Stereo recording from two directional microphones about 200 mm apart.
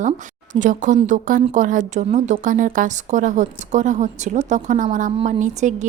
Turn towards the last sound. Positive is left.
turn(degrees=-35)  # may be behind; listen again after turning